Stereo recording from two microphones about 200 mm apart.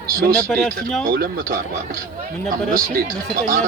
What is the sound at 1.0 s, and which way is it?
Speech, 45° right (ahead or behind).